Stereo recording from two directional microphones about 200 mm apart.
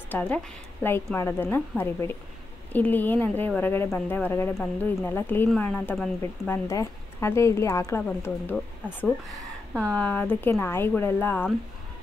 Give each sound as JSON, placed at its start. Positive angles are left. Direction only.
{"t": 0.1, "sound": "speech", "side_deg": 5}